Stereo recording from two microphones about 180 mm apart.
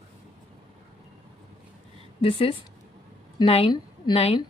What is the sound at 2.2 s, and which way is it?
A woman's voice, 30° left (ahead or behind).